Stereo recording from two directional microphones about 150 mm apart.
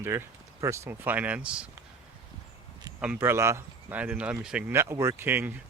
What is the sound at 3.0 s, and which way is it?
Speech, 10° right (ahead or behind).